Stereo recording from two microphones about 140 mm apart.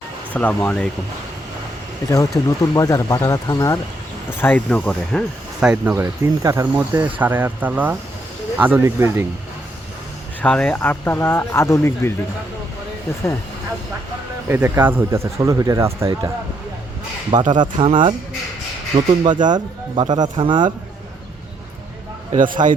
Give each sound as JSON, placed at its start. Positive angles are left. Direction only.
{"t": 0.3, "sound": "speech", "side_deg": 10}
{"t": 2.0, "sound": "speech", "side_deg": 20}
{"t": 5.5, "sound": "speech", "side_deg": -10}
{"t": 10.4, "sound": "speech", "side_deg": 10}
{"t": 14.4, "sound": "speech", "side_deg": -15}
{"t": 17.3, "sound": "speech", "side_deg": -35}
{"t": 22.6, "sound": "a man's voice", "side_deg": -60}